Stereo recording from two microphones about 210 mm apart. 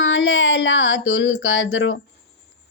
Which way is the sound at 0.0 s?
65° left (ahead or behind).